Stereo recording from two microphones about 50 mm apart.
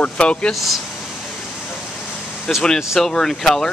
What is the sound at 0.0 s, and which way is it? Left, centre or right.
Speech, left.